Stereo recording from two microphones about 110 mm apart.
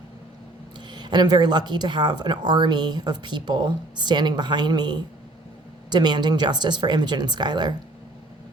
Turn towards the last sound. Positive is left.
turn(degrees=-40)  # may be behind; listen again after turning